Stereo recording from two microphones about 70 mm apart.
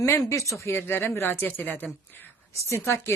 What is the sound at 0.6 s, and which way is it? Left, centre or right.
Speech, left.